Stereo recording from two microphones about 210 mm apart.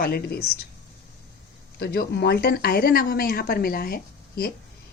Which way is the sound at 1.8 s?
50° left (ahead or behind).